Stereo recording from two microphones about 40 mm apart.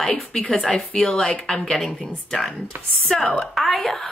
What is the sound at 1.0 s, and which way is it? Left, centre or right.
Speech, centre.